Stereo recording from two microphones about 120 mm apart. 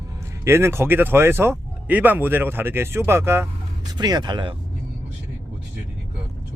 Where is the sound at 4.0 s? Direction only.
35° right (ahead or behind).